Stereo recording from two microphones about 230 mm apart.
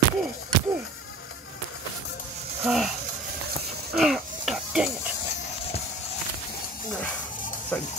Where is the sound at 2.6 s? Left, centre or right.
Centre.